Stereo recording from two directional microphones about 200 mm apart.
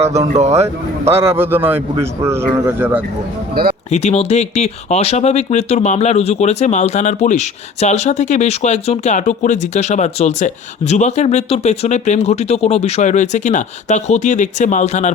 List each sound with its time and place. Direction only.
0.3 s speech: 35° right (ahead or behind)
1.1 s a man's voice: 15° right (ahead or behind)
3.5 s speech: 45° right (ahead or behind)
3.9 s speech: 30° left (ahead or behind)